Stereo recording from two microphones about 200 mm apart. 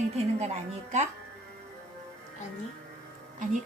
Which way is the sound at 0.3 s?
35° right (ahead or behind).